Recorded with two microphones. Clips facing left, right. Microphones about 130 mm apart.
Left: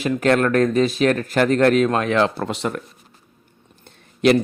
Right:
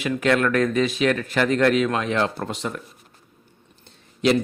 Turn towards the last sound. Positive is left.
turn(degrees=60)  # may be behind; listen again after turning